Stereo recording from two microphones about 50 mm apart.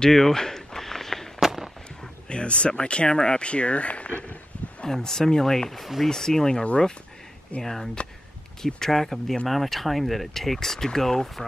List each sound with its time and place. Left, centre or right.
0.0 s a sound: centre
1.4 s a sound: centre
2.2 s speech: left
4.8 s speech: centre
6.0 s speech: centre
6.6 s speech: left
7.6 s speech: centre